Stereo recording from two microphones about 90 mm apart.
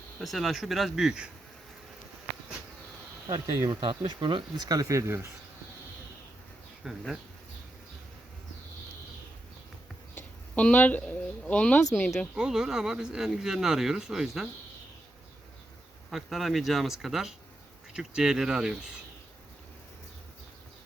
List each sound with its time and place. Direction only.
0.2 s speech: centre (ahead or behind)
3.2 s speech: 40° right (ahead or behind)
3.7 s speech: 65° right (ahead or behind)
4.6 s speech: 45° right (ahead or behind)
6.8 s speech: 5° right (ahead or behind)
10.2 s speech: 15° left (ahead or behind)
12.1 s speech: 5° right (ahead or behind)
16.0 s speech: centre (ahead or behind)